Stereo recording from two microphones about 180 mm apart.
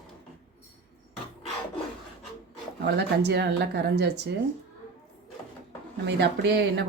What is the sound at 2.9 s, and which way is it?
Speech, 65° right (ahead or behind).